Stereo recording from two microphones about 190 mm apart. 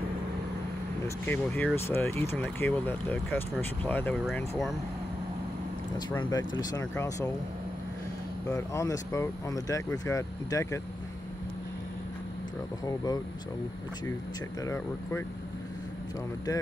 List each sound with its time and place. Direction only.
1.0 s speech: 10° left (ahead or behind)
5.9 s speech: 20° left (ahead or behind)
8.5 s speech: 15° left (ahead or behind)
12.8 s speech: 20° left (ahead or behind)
14.6 s speech: 15° left (ahead or behind)